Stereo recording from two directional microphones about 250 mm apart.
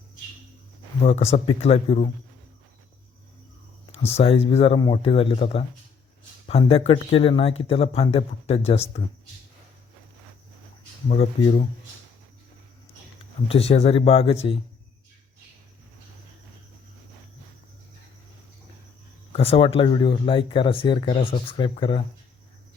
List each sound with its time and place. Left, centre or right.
1.0 s speech: left
4.1 s speech: left
11.1 s speech: left
13.5 s speech: left
19.3 s speech: left